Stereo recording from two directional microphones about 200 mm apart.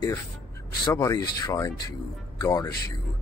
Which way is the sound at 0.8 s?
20° left (ahead or behind).